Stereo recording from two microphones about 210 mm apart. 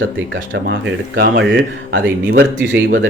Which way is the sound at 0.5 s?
60° right (ahead or behind).